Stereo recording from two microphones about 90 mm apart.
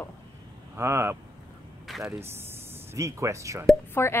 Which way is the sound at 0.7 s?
30° right (ahead or behind).